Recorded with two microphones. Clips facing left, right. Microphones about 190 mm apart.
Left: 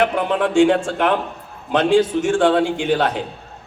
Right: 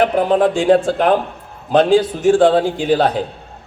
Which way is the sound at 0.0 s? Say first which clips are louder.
Right 5 dB; 35° right (ahead or behind).